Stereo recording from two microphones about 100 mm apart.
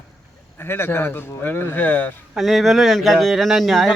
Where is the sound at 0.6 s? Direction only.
20° left (ahead or behind).